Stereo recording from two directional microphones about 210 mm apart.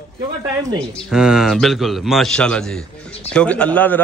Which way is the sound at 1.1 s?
5° right (ahead or behind).